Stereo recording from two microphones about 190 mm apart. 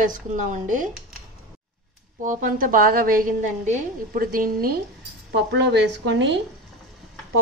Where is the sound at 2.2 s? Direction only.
45° right (ahead or behind).